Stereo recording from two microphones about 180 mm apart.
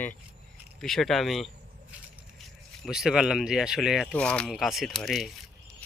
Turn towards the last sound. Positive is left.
turn(degrees=0)  # may be behind; listen again after turning